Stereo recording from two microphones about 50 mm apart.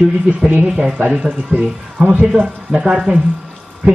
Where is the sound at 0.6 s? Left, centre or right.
Centre.